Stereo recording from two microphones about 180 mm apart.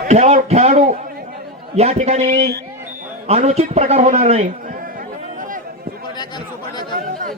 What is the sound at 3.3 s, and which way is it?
A man's voice, 35° right (ahead or behind).